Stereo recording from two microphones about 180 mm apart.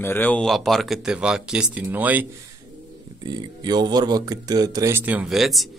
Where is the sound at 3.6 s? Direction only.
25° right (ahead or behind); by 5.6 s centre (ahead or behind).